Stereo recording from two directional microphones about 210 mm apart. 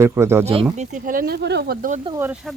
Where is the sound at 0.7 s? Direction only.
35° right (ahead or behind).